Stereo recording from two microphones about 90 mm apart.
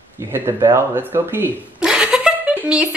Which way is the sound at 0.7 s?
25° right (ahead or behind).